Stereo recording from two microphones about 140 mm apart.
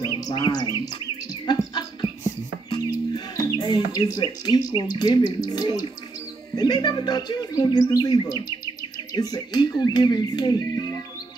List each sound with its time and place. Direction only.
0.0 s speech: 30° left (ahead or behind)
0.8 s bird: 30° left (ahead or behind)
2.7 s music: 25° left (ahead or behind)
3.5 s speech: 30° left (ahead or behind)
6.5 s bird: 30° left (ahead or behind)